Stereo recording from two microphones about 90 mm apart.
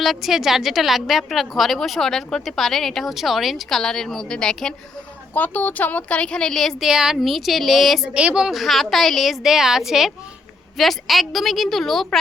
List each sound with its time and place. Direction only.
0.0 s a woman's voice: centre (ahead or behind)
8.1 s a woman's voice: 10° right (ahead or behind)